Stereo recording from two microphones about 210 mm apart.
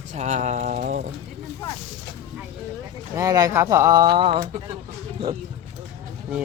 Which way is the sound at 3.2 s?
15° right (ahead or behind).